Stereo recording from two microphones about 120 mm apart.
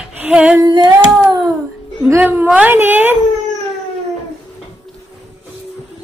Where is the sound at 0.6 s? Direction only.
35° right (ahead or behind).